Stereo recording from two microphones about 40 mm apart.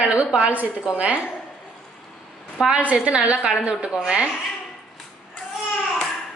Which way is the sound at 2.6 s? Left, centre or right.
Right.